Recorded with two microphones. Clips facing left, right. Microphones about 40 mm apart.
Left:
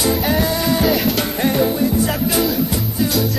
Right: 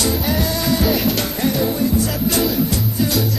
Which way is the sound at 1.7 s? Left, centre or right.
Centre.